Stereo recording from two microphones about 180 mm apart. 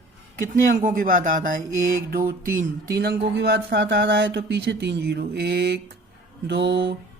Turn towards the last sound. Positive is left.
turn(degrees=-75)  # may be behind; listen again after turning